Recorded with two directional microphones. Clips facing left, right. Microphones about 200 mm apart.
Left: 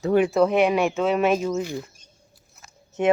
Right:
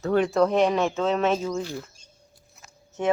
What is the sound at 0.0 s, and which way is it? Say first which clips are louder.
Speech: left 2 dB; 10° left (ahead or behind).